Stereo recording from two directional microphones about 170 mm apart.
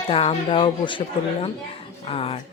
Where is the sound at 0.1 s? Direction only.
30° left (ahead or behind).